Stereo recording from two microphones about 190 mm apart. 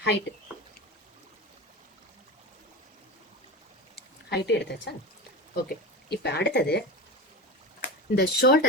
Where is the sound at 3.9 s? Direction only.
60° left (ahead or behind).